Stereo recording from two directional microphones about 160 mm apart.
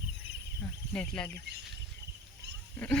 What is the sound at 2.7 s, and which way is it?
Speech, 10° left (ahead or behind).